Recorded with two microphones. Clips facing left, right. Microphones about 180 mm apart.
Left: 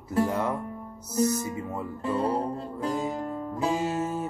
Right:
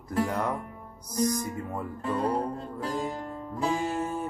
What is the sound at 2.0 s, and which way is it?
Speech, 25° left (ahead or behind).